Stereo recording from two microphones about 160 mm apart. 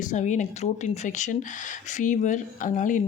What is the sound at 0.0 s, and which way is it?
Speech, 50° left (ahead or behind).